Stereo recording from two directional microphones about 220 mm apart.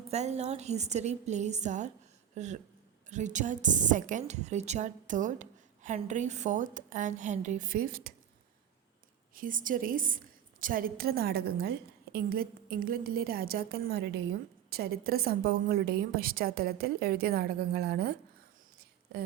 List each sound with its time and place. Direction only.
0.1 s a woman's voice: 30° right (ahead or behind)
9.3 s a woman's voice: 40° right (ahead or behind)